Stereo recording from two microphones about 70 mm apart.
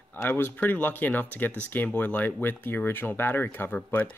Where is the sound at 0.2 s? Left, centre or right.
Left.